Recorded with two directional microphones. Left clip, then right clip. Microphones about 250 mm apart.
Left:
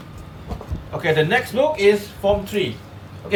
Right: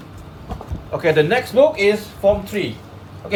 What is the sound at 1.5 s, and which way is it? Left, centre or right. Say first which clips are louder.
Speech: right 3 dB; centre.